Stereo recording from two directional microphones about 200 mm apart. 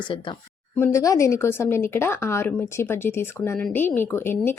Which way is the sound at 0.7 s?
15° left (ahead or behind).